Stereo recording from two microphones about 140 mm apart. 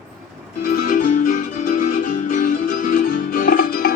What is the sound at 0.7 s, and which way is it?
Music, 75° left (ahead or behind).